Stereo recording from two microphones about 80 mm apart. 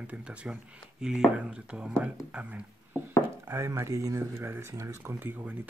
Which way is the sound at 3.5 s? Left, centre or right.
Right.